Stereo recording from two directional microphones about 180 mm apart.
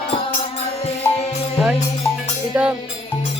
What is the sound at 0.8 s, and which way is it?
Music, 35° left (ahead or behind).